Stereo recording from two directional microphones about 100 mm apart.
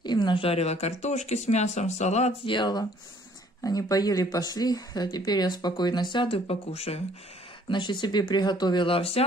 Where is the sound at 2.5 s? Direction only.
50° left (ahead or behind).